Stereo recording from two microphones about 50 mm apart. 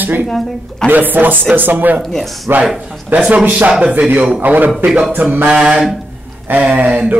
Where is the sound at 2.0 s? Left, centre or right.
Centre.